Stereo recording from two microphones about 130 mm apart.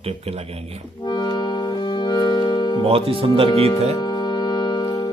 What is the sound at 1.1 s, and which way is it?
Music, 35° left (ahead or behind).